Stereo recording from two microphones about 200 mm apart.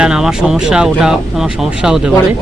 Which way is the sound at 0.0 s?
5° right (ahead or behind).